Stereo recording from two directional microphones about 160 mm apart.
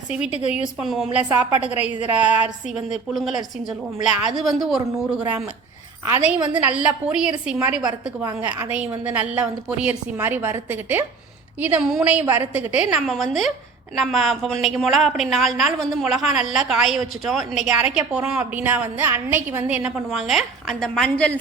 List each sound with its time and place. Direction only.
0.1 s a woman's voice: 5° right (ahead or behind)
7.8 s a woman's voice: 20° right (ahead or behind); by 21.3 s 5° left (ahead or behind)